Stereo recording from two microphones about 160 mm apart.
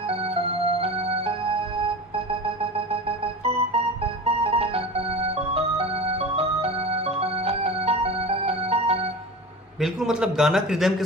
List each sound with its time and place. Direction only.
0.1 s music: 35° right (ahead or behind)
3.4 s music: 40° right (ahead or behind)
9.8 s a man's voice: centre (ahead or behind)